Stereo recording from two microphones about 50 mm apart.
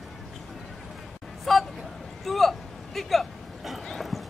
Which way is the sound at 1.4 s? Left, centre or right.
Centre.